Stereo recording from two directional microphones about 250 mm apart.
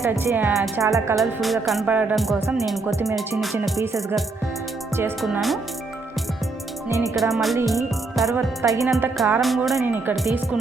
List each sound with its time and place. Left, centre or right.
0.0 s speech: centre
1.1 s speech: centre
3.5 s speech: centre
6.8 s speech: centre
7.2 s speech: centre
8.6 s speech: centre
8.9 s speech: centre